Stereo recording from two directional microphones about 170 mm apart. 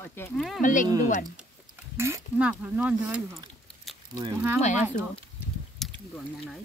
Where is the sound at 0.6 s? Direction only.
50° left (ahead or behind).